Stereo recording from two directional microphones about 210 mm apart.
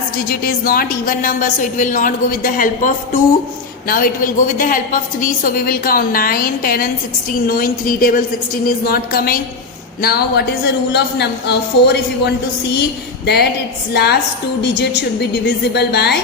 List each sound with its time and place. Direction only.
0.3 s a woman's voice: 45° left (ahead or behind)